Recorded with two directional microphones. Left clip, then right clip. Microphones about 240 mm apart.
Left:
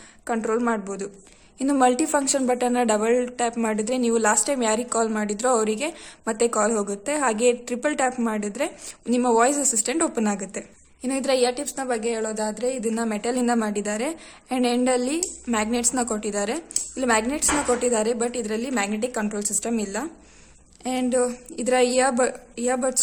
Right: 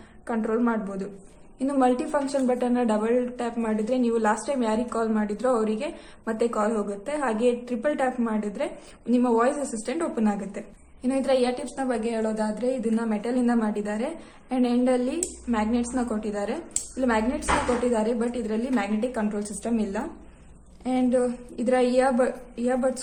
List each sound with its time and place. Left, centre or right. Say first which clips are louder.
0.3 s speech: left 2 dB; left